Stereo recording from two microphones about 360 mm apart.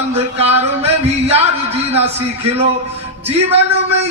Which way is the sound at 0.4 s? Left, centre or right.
Centre.